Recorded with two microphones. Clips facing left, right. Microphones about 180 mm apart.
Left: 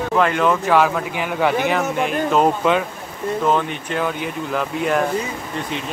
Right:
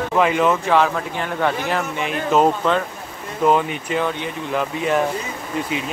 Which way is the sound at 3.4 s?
5° right (ahead or behind).